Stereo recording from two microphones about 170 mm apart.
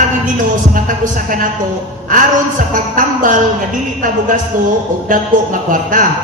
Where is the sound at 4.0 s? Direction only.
50° right (ahead or behind).